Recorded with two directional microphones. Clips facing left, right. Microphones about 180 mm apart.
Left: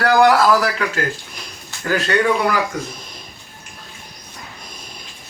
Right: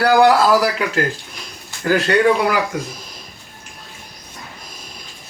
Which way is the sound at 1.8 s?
30° right (ahead or behind).